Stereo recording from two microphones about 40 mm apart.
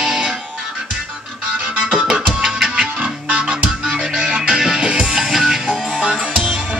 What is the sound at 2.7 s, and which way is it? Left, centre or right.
Music, right.